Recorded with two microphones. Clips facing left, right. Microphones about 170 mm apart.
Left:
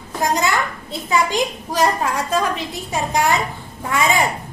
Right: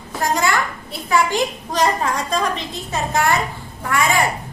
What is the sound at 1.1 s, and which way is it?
A woman's voice, 15° left (ahead or behind).